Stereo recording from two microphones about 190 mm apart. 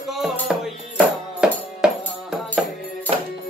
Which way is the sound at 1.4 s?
5° right (ahead or behind).